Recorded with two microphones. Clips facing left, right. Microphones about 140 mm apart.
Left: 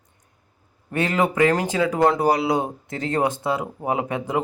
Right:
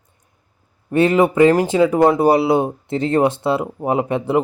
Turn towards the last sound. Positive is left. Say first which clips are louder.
# right 5 dB
turn(degrees=-25)  # may be behind; listen again after turning